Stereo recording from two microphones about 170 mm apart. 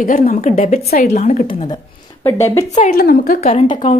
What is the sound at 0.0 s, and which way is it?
A woman's voice, 50° left (ahead or behind).